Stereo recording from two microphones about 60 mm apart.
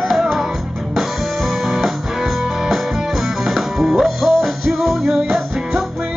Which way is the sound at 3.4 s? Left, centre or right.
Centre.